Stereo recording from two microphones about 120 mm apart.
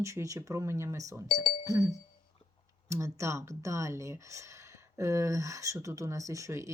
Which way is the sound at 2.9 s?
25° right (ahead or behind).